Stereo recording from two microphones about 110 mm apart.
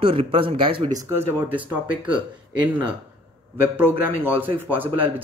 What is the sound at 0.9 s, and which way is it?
Speech, 25° right (ahead or behind).